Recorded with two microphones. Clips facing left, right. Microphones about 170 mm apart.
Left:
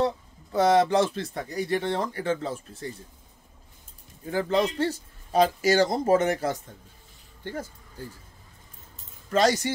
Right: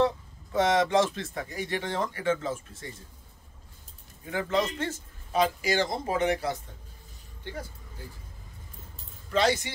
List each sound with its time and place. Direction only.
0.0 s a man's voice: 35° left (ahead or behind)
4.3 s a man's voice: 35° left (ahead or behind)
9.3 s speech: 45° left (ahead or behind)